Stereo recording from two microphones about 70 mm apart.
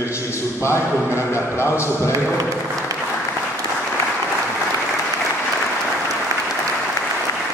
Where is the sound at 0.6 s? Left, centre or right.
Left.